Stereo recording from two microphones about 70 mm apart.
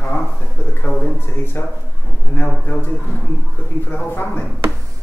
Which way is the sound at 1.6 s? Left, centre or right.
Left.